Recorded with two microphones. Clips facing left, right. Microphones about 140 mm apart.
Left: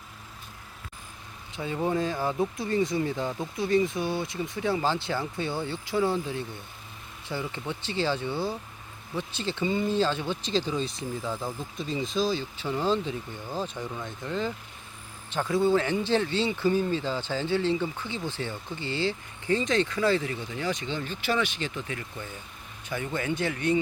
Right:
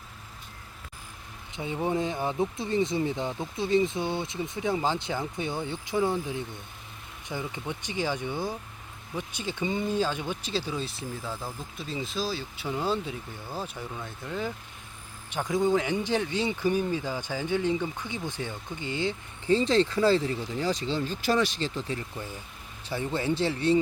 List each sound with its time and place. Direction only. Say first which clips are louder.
1.5 s speech: left 1 dB; 20° right (ahead or behind)
19.5 s speech: right 3 dB; 30° right (ahead or behind)